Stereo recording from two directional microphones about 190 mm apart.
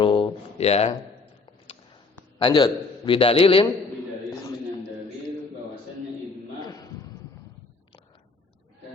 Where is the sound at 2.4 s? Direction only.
25° left (ahead or behind).